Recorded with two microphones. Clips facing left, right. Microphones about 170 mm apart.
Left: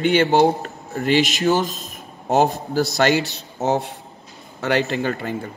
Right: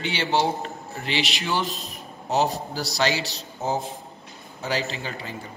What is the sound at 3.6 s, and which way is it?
Speech, 75° left (ahead or behind).